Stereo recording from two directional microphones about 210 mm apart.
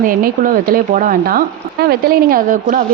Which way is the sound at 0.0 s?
40° right (ahead or behind).